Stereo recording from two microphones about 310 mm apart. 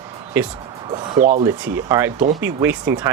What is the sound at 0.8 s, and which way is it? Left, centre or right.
Speech, centre.